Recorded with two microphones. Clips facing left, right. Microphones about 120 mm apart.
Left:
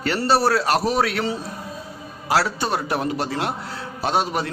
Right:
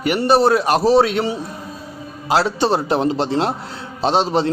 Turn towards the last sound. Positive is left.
turn(degrees=-25)  # may be behind; listen again after turning